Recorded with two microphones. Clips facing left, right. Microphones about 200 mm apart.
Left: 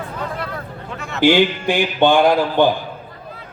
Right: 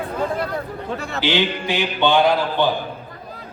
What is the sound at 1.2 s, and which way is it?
Mantra, 50° left (ahead or behind).